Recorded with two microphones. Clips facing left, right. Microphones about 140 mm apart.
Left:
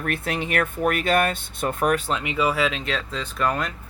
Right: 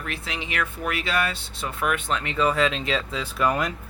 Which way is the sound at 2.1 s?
15° left (ahead or behind).